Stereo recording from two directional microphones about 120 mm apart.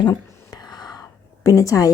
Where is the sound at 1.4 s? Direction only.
25° left (ahead or behind).